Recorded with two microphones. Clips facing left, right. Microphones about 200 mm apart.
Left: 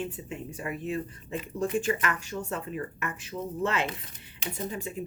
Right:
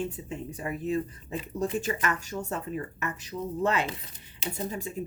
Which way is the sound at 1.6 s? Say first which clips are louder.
Left 1 dB; 40° right (ahead or behind).